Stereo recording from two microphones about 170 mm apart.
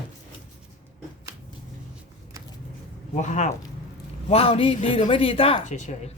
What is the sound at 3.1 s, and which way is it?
Speech, 45° left (ahead or behind).